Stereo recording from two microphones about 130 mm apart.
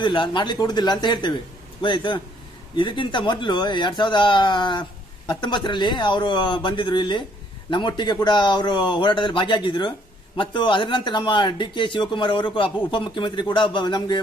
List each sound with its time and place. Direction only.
0.0 s speech: 40° left (ahead or behind)